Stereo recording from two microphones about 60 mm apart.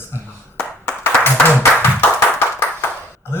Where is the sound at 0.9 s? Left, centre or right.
Left.